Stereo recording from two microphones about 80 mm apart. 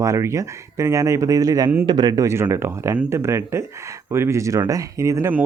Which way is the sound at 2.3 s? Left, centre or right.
Right.